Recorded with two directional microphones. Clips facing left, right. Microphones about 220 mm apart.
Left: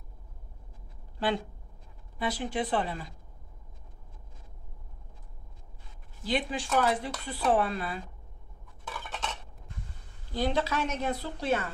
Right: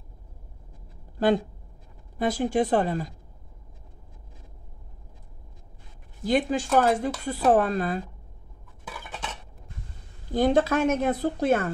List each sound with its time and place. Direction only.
2.1 s speech: 45° right (ahead or behind)
6.2 s speech: 45° right (ahead or behind)
8.8 s dishes: 10° right (ahead or behind)
10.3 s speech: 50° right (ahead or behind)